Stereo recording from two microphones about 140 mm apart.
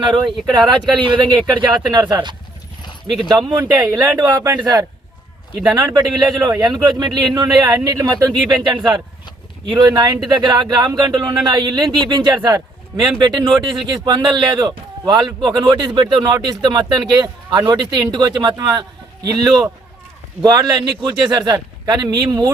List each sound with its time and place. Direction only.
0.0 s speech: 35° right (ahead or behind)
3.2 s speech: 30° right (ahead or behind)